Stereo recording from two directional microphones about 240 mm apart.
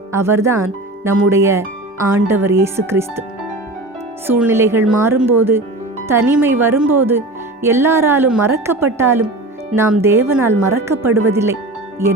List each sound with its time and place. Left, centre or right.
0.1 s speech: centre
4.3 s speech: centre